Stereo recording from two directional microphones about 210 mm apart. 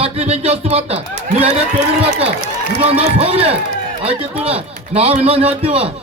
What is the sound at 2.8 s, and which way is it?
A man's voice, 30° right (ahead or behind).